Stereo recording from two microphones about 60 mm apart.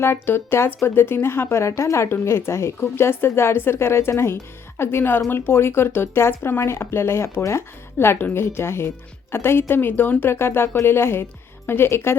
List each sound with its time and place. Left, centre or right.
0.0 s a woman's voice: left